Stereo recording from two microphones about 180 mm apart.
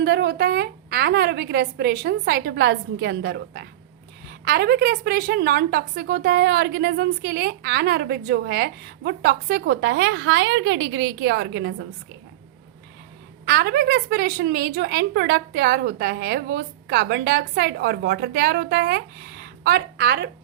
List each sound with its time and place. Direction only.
0.0 s a woman's voice: 70° right (ahead or behind)
13.4 s a woman's voice: 60° right (ahead or behind)